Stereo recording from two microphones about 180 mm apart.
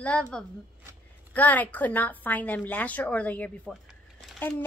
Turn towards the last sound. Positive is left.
turn(degrees=10)  # may be behind; listen again after turning